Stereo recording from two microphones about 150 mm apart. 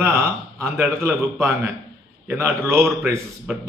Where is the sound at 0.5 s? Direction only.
15° right (ahead or behind).